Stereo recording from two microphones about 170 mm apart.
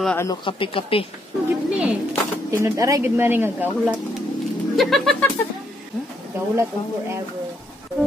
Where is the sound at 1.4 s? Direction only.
5° right (ahead or behind).